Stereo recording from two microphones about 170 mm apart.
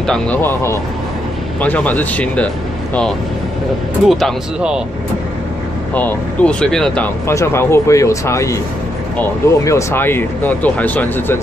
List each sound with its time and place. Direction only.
0.0 s speech: 5° left (ahead or behind)
5.9 s speech: 10° left (ahead or behind)